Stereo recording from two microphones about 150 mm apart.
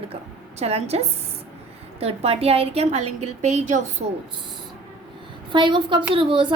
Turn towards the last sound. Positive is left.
turn(degrees=-35)  # may be behind; listen again after turning